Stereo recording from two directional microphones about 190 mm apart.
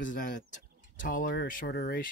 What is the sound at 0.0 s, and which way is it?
Speech, 45° left (ahead or behind).